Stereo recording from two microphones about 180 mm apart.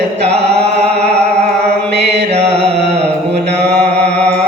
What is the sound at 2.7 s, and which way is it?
Carnatic music, 70° right (ahead or behind).